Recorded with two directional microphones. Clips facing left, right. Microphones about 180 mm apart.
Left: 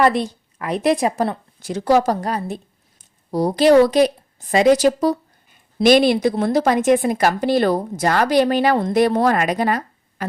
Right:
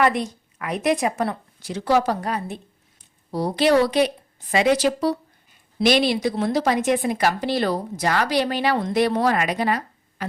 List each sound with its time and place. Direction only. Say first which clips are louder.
0.0 s a woman's voice: left 3 dB; 35° left (ahead or behind)
1.6 s a woman's voice: left 4 dB; 45° left (ahead or behind)